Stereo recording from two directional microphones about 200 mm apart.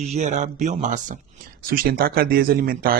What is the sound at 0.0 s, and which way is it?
Speech, 35° right (ahead or behind).